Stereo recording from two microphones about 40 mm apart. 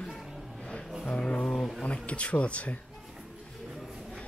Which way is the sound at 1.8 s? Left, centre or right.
Left.